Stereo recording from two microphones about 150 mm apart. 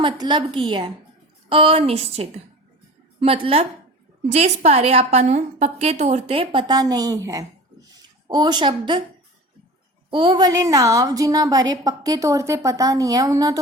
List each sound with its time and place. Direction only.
0.0 s a woman's voice: 30° right (ahead or behind)
10.1 s a woman's voice: 30° right (ahead or behind)